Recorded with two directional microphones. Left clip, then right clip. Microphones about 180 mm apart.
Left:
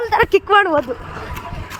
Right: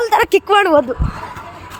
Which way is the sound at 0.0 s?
40° right (ahead or behind).